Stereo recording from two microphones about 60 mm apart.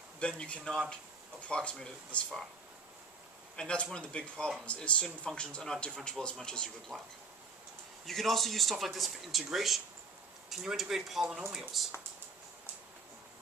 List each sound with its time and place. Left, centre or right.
0.2 s speech: centre
3.5 s speech: centre
8.0 s speech: centre